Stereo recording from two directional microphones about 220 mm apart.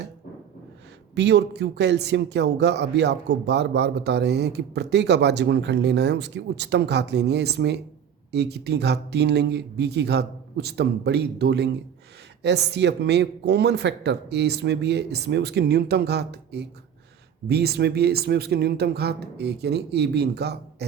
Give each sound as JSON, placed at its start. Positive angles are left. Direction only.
{"t": 1.1, "sound": "speech", "side_deg": -50}